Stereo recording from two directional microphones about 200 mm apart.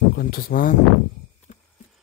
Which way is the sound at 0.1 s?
50° left (ahead or behind).